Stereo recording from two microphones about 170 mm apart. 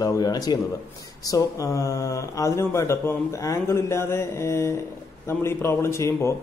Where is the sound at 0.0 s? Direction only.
20° left (ahead or behind).